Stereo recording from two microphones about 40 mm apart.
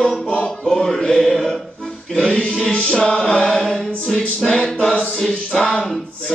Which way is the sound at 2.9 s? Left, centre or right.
Centre.